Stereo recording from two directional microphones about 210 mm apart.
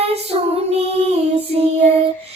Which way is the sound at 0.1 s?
30° right (ahead or behind).